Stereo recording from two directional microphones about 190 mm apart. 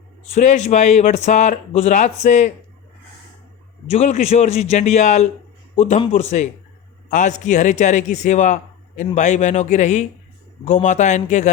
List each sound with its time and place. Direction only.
0.3 s speech: 35° left (ahead or behind)
3.8 s speech: 35° left (ahead or behind)